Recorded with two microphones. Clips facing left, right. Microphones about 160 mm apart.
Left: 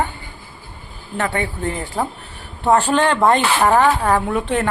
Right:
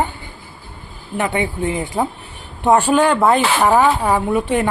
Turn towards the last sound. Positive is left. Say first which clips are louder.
# right 2 dB
turn(degrees=-10)  # may be behind; listen again after turning